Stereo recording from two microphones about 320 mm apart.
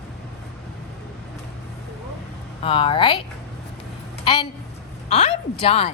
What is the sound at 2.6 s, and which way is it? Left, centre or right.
Speech, centre.